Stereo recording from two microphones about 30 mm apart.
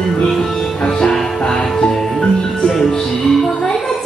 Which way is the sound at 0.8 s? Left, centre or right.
Left.